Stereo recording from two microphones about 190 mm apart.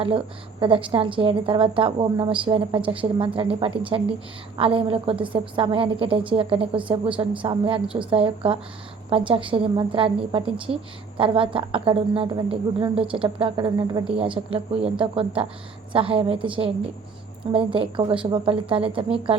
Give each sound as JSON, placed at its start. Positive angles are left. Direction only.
{"t": 0.6, "sound": "a woman's voice", "side_deg": -25}